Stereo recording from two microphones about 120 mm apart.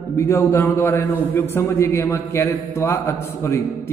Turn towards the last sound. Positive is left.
turn(degrees=20)  # may be behind; listen again after turning